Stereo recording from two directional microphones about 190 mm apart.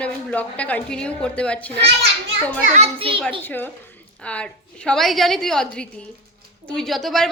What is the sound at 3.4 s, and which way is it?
A woman's voice, 10° left (ahead or behind).